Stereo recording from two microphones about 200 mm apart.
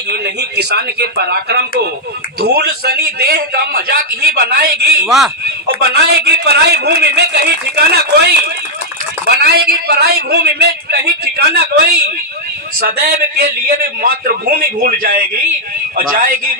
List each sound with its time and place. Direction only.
0.1 s a man's voice: 55° right (ahead or behind)
5.0 s speech: centre (ahead or behind)
5.6 s a man's voice: 50° right (ahead or behind)